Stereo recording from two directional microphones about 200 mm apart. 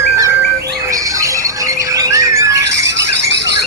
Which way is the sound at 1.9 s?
15° right (ahead or behind).